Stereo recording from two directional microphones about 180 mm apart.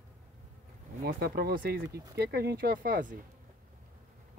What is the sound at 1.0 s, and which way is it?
Speech, 60° right (ahead or behind).